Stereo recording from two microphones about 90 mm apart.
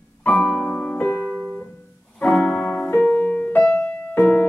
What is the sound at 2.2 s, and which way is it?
Music, 15° left (ahead or behind).